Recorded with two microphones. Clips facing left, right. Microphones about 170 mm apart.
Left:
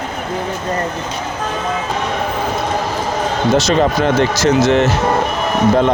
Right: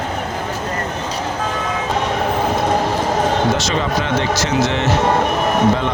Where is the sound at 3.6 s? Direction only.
40° left (ahead or behind).